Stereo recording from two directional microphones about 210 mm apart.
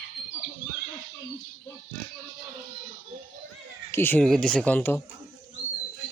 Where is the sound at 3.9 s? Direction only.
10° left (ahead or behind).